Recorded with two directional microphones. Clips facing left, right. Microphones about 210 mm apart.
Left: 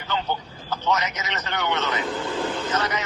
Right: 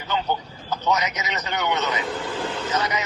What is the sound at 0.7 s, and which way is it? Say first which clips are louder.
Speech: right 1 dB; 15° right (ahead or behind).